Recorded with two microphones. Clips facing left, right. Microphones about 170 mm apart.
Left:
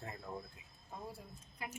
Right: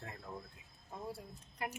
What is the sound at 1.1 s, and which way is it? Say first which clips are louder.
Speech: right 4 dB; 70° right (ahead or behind).